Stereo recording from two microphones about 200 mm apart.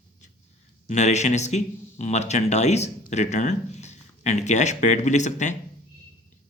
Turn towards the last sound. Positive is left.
turn(degrees=35)  # may be behind; listen again after turning